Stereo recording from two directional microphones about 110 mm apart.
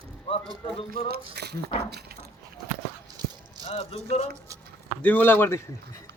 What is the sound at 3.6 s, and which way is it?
Speech, 65° left (ahead or behind).